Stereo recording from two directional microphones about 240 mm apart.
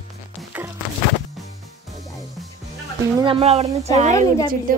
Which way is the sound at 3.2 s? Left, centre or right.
Right.